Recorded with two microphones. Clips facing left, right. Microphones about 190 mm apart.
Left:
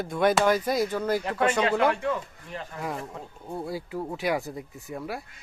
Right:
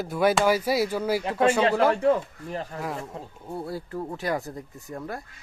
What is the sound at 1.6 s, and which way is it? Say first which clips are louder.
Speech: right 3 dB; 30° right (ahead or behind).